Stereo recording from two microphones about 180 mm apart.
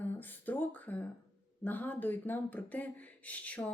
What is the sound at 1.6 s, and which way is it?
Speech, 10° left (ahead or behind).